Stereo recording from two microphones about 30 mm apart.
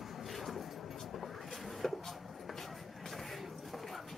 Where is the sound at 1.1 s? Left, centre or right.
Centre.